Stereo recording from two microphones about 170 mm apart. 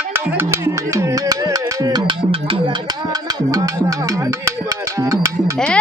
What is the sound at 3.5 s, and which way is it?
Music, 20° right (ahead or behind).